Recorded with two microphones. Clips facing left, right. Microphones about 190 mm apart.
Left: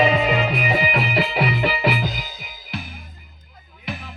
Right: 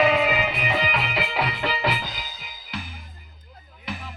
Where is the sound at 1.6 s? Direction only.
15° left (ahead or behind).